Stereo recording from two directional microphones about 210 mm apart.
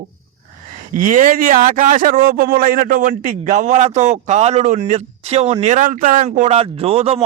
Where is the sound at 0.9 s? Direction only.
40° right (ahead or behind).